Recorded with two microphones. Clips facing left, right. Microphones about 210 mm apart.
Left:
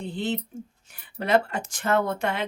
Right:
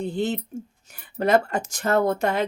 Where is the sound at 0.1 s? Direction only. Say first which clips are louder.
Right 3 dB; 45° right (ahead or behind).